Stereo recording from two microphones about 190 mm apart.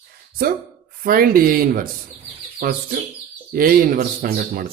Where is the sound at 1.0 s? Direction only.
50° right (ahead or behind).